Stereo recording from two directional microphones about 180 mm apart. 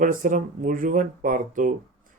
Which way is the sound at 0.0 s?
45° right (ahead or behind).